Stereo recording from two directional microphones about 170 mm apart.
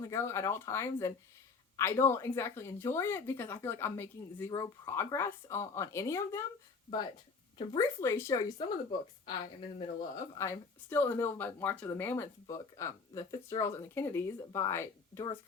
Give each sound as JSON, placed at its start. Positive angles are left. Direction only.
{"t": 0.1, "sound": "speech", "side_deg": 15}
{"t": 7.8, "sound": "a woman's voice", "side_deg": 15}